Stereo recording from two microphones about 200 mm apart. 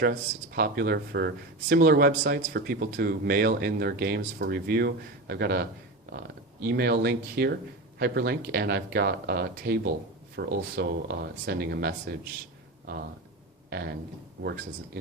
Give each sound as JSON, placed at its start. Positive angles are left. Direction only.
{"t": 0.0, "sound": "speech", "side_deg": -50}
{"t": 6.7, "sound": "speech", "side_deg": -50}
{"t": 13.7, "sound": "speech", "side_deg": -55}